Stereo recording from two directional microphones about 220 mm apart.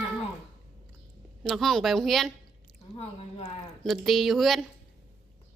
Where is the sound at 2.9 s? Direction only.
25° left (ahead or behind).